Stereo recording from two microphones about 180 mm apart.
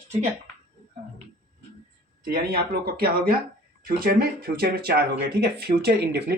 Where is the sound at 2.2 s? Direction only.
60° right (ahead or behind).